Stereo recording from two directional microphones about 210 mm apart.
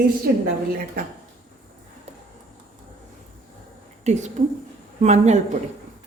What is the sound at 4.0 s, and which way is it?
A woman's voice, 35° right (ahead or behind).